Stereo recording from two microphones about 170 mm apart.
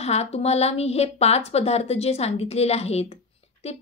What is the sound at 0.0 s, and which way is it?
A woman's voice, 40° left (ahead or behind).